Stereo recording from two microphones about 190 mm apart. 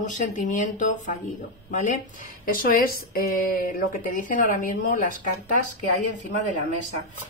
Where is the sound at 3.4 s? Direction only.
50° left (ahead or behind).